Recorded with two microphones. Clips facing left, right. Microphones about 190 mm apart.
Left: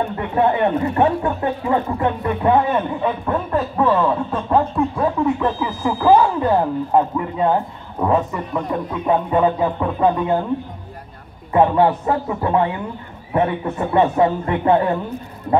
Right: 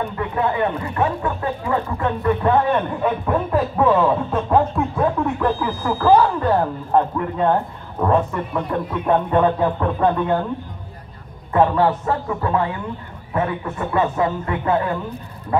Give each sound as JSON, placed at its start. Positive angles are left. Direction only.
{"t": 0.4, "sound": "speech", "side_deg": 25}
{"t": 3.0, "sound": "speech", "side_deg": -5}
{"t": 5.9, "sound": "speech", "side_deg": 15}
{"t": 11.5, "sound": "speech", "side_deg": 20}